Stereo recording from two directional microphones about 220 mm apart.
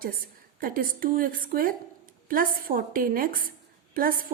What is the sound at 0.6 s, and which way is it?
A woman's voice, 40° right (ahead or behind).